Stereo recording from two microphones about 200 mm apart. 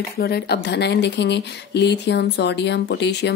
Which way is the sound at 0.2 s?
55° left (ahead or behind).